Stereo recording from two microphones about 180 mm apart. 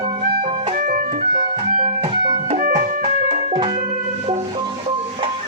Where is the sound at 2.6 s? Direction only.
50° right (ahead or behind).